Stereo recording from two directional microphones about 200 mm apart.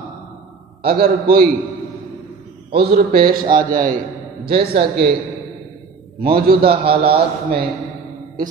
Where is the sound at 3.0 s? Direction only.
45° right (ahead or behind).